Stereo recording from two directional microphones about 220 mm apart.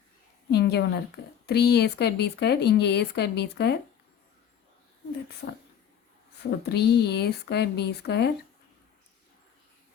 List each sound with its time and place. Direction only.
0.5 s a woman's voice: 50° left (ahead or behind)
6.7 s a woman's voice: 50° left (ahead or behind)